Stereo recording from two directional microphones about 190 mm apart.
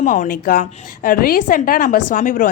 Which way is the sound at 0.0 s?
45° left (ahead or behind).